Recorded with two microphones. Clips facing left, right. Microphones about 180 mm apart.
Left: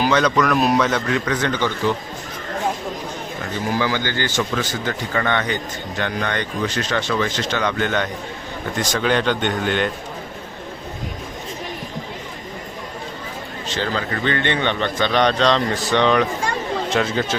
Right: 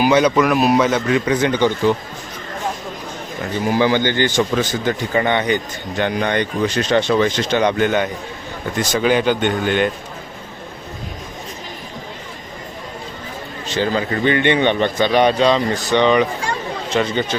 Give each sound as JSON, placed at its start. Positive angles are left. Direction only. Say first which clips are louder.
{"t": 0.0, "sound": "a man's voice", "louder": "right 4 dB", "side_deg": -10}
{"t": 3.7, "sound": "a man's voice", "louder": "right 6 dB", "side_deg": -20}
{"t": 13.7, "sound": "a man's voice", "louder": "right 5 dB", "side_deg": -15}